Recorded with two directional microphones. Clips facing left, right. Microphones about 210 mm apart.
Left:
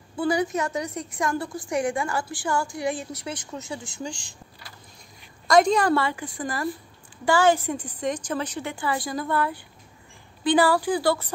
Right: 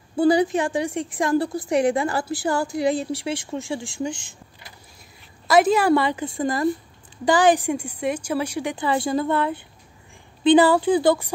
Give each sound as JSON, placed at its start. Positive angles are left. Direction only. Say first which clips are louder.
{"t": 0.1, "sound": "a woman's voice", "louder": "right 6 dB", "side_deg": -40}
{"t": 5.5, "sound": "a woman's voice", "louder": "right 2 dB", "side_deg": -5}